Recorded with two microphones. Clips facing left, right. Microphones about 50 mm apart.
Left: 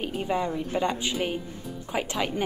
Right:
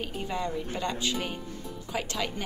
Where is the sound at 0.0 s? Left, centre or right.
Centre.